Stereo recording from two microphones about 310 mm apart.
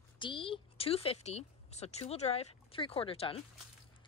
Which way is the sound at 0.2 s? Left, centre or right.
Centre.